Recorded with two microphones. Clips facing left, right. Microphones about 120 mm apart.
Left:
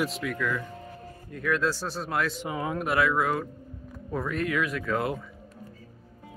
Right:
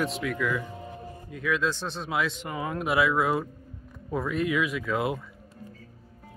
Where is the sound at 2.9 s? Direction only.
10° right (ahead or behind).